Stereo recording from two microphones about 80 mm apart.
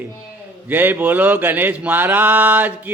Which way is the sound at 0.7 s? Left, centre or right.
Right.